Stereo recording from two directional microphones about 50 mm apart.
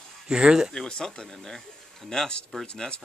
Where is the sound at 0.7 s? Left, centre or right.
Centre.